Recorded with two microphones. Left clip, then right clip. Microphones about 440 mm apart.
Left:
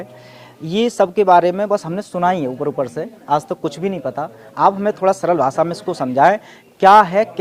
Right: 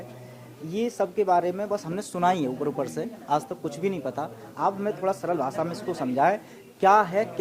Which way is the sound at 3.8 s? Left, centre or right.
Left.